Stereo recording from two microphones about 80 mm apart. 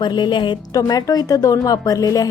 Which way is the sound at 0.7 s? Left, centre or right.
Left.